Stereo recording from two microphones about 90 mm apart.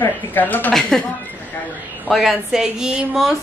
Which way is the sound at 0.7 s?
5° left (ahead or behind).